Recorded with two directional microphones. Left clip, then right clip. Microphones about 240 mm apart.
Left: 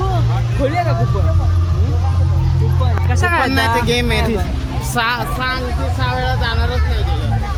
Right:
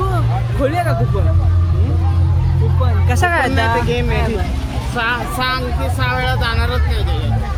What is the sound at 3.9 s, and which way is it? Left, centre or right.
Speech, left.